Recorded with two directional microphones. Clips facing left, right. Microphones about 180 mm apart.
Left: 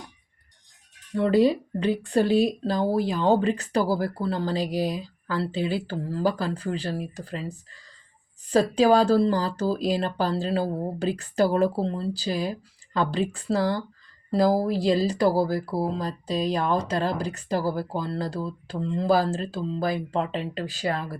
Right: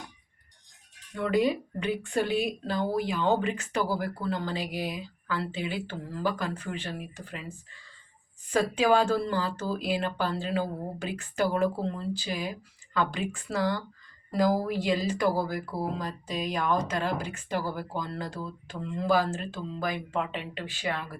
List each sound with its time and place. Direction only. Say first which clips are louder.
1.1 s speech: left 6 dB; 35° left (ahead or behind)